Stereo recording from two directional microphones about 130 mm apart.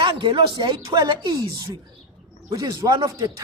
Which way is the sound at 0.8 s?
25° right (ahead or behind).